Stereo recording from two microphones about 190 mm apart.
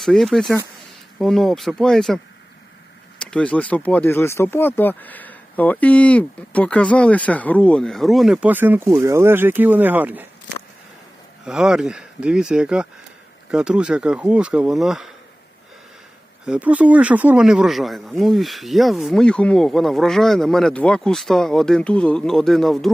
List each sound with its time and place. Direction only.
0.0 s speech: centre (ahead or behind)
11.4 s speech: 5° right (ahead or behind)
16.5 s speech: 5° right (ahead or behind)